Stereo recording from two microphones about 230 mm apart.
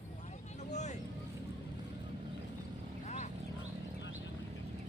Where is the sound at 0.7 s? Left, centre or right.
Left.